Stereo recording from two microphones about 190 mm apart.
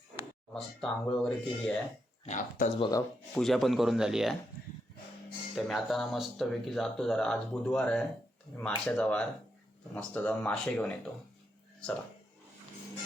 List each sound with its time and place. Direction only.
0.5 s speech: 5° left (ahead or behind)
2.2 s speech: 35° left (ahead or behind)
3.3 s speech: centre (ahead or behind)
5.5 s speech: centre (ahead or behind)